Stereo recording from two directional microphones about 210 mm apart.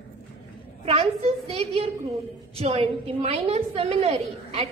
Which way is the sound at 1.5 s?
30° right (ahead or behind).